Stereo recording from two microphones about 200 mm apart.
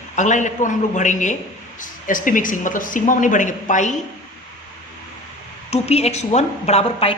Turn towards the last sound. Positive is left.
turn(degrees=30)  # may be behind; listen again after turning